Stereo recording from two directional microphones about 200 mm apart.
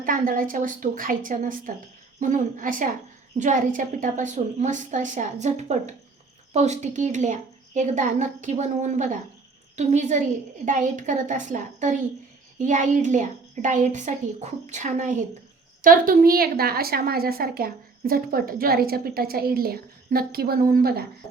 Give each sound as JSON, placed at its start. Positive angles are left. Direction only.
{"t": 0.0, "sound": "a woman's voice", "side_deg": -45}